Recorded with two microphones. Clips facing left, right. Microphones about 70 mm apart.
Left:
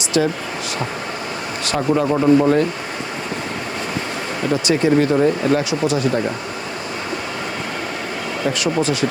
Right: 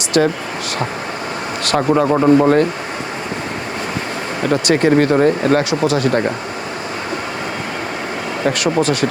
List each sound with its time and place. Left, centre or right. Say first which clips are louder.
0.1 s speech: right 3 dB; right
1.6 s speech: right 3 dB; right
4.4 s speech: right 3 dB; right
8.4 s speech: right 3 dB; right